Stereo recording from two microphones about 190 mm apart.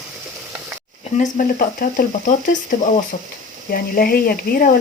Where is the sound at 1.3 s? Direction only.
50° left (ahead or behind).